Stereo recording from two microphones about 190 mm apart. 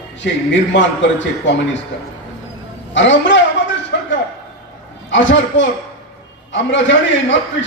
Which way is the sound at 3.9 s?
65° left (ahead or behind).